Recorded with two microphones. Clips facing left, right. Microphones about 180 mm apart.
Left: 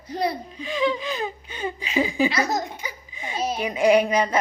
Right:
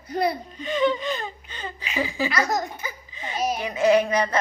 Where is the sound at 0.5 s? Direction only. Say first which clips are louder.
Right 1 dB; centre (ahead or behind).